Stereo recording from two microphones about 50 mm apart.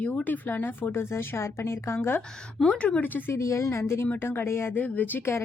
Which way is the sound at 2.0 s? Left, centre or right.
Left.